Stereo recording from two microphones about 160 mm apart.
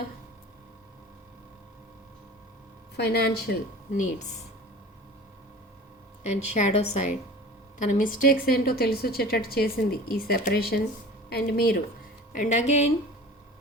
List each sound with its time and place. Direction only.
2.9 s speech: 90° left
6.2 s a woman's voice: 45° left (ahead or behind); by 11.8 s 70° left (ahead or behind)
12.3 s a woman's voice: 50° left (ahead or behind)